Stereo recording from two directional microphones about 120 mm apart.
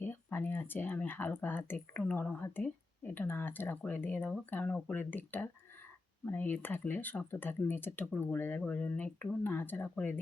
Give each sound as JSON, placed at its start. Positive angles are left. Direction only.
{"t": 0.0, "sound": "speech", "side_deg": 15}